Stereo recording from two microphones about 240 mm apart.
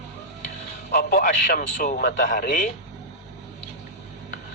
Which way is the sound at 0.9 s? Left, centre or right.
Left.